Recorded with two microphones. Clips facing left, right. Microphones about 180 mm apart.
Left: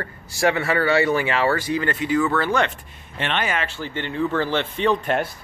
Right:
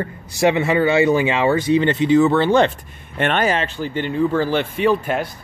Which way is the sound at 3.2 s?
45° right (ahead or behind).